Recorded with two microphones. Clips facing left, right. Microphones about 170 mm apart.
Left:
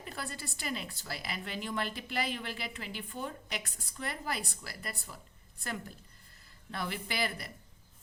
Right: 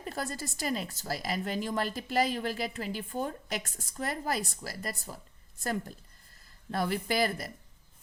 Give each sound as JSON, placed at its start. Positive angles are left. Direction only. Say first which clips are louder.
{"t": 0.0, "sound": "a woman's voice", "louder": "right 6 dB", "side_deg": -40}
{"t": 6.7, "sound": "speech", "louder": "right 7 dB", "side_deg": -45}